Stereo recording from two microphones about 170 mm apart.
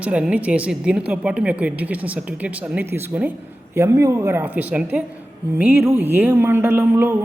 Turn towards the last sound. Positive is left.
turn(degrees=-15)  # may be behind; listen again after turning